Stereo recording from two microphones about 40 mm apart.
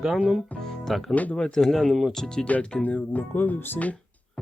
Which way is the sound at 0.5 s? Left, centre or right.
Left.